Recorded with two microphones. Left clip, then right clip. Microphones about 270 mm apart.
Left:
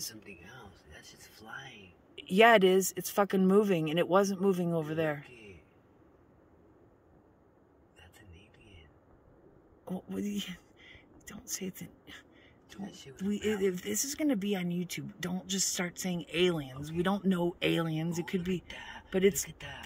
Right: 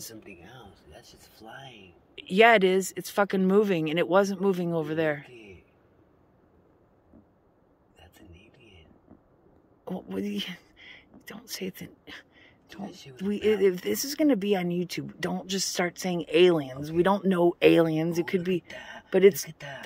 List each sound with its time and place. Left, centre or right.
2.1 s speech: centre
9.8 s speech: centre